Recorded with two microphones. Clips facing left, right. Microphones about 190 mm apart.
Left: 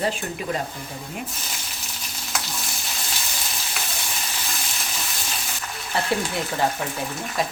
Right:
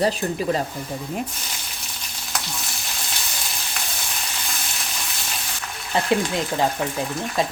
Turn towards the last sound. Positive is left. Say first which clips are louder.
# right 3 dB
turn(degrees=-15)  # may be behind; listen again after turning